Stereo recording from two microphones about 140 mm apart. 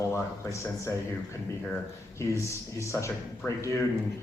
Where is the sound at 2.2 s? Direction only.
20° left (ahead or behind).